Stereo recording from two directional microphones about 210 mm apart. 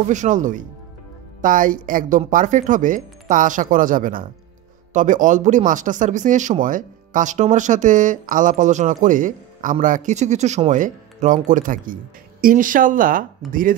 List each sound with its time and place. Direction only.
0.1 s speech: 35° right (ahead or behind)